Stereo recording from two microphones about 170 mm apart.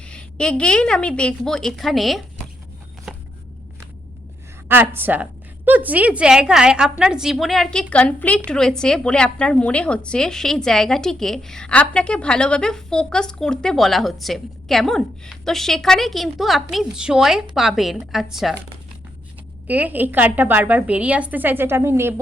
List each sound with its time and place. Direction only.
0.0 s a woman's voice: 5° left (ahead or behind)
3.1 s a sound: 5° right (ahead or behind)
4.7 s a woman's voice: 10° right (ahead or behind)
19.6 s a woman's voice: 10° right (ahead or behind)